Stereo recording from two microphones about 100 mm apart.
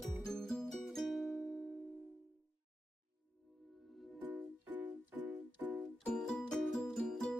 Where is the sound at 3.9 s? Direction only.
Centre (ahead or behind).